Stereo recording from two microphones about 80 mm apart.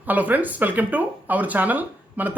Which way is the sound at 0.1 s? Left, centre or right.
Right.